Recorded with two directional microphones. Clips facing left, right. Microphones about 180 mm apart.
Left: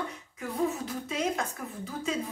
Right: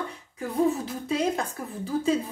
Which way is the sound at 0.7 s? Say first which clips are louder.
Right 6 dB; 30° right (ahead or behind).